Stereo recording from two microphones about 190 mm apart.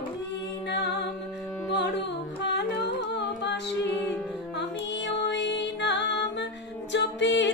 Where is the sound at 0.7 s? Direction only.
65° left (ahead or behind).